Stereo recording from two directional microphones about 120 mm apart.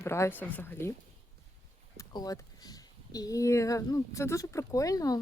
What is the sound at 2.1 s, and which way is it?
A woman's voice, 35° left (ahead or behind).